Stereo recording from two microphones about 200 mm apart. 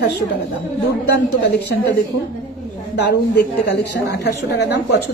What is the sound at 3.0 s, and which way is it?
A woman's voice, 55° left (ahead or behind).